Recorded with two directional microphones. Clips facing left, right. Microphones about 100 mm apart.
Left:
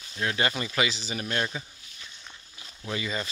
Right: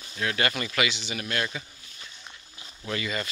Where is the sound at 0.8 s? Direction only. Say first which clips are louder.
Even; 35° left (ahead or behind).